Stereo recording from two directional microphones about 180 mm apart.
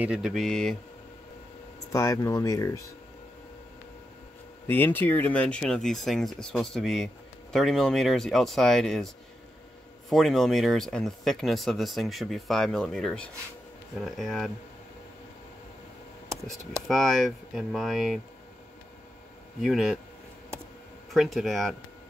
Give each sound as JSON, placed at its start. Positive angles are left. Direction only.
{"t": 0.0, "sound": "speech", "side_deg": -5}
{"t": 1.9, "sound": "speech", "side_deg": 15}
{"t": 4.6, "sound": "speech", "side_deg": 10}
{"t": 16.4, "sound": "speech", "side_deg": 0}
{"t": 19.6, "sound": "speech", "side_deg": 0}
{"t": 21.1, "sound": "speech", "side_deg": 0}